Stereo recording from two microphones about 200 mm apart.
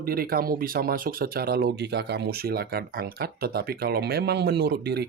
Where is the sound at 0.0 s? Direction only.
45° right (ahead or behind).